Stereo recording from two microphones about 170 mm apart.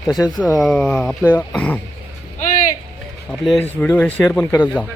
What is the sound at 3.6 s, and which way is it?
Speech, 10° left (ahead or behind).